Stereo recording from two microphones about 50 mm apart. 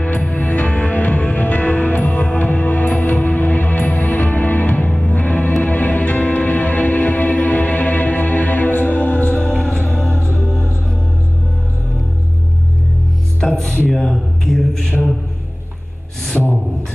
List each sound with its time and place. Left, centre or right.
0.0 s music: left
9.3 s music: centre
13.4 s music: centre
13.7 s a sound: centre
14.0 s mantra: centre
16.3 s a sound: centre